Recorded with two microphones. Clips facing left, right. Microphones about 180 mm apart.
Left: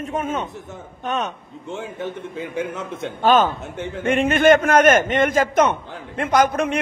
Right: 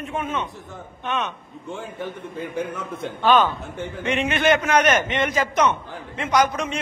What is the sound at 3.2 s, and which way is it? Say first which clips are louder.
A man's voice: left 2 dB; 45° left (ahead or behind).